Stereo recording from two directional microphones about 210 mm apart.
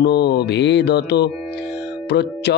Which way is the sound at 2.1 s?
55° left (ahead or behind).